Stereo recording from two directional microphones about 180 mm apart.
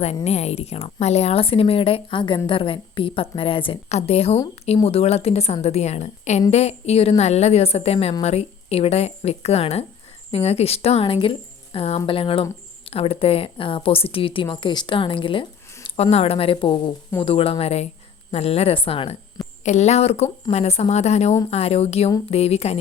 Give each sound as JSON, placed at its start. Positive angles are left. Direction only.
{"t": 0.3, "sound": "speech", "side_deg": 35}